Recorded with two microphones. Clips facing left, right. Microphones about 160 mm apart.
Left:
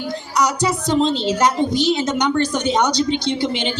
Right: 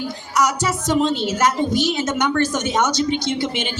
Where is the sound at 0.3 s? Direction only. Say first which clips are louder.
Left 1 dB; 20° left (ahead or behind).